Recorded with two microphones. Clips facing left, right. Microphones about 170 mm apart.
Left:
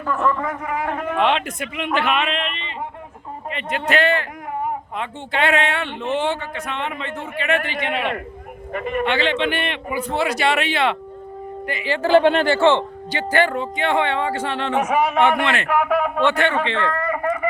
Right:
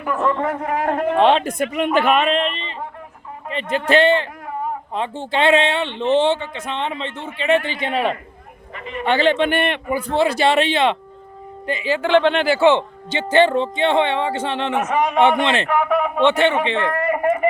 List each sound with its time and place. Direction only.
0.0 s a man's voice: 20° right (ahead or behind); by 8.1 s 35° right (ahead or behind)
8.7 s a man's voice: 50° left (ahead or behind)
9.0 s a man's voice: 45° right (ahead or behind)
10.0 s a man's voice: 30° right (ahead or behind)
12.2 s speech: 5° left (ahead or behind)
12.5 s speech: 15° right (ahead or behind)
14.8 s a man's voice: 10° left (ahead or behind)
16.2 s a man's voice: 25° right (ahead or behind)